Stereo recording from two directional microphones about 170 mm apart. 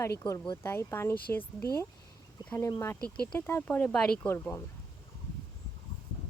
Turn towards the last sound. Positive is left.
turn(degrees=15)  # may be behind; listen again after turning